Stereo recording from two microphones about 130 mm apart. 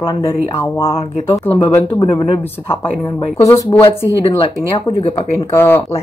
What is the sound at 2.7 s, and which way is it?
Speech, 20° left (ahead or behind).